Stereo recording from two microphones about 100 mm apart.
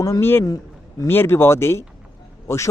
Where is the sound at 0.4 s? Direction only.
40° left (ahead or behind).